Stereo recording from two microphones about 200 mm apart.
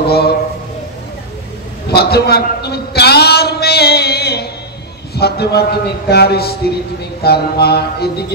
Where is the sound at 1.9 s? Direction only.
55° left (ahead or behind).